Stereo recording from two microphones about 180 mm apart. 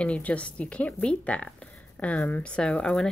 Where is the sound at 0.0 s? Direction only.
5° left (ahead or behind).